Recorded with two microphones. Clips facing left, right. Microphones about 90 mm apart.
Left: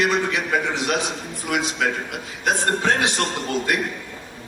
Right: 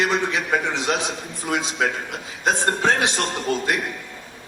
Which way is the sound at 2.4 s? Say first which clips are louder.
Right 1 dB; 20° right (ahead or behind).